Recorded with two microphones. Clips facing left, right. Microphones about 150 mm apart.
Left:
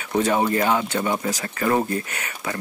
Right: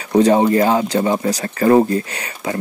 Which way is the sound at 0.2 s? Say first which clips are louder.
Right 8 dB; 30° right (ahead or behind).